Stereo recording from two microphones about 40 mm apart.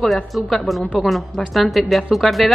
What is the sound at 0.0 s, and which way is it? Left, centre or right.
A woman's voice, centre.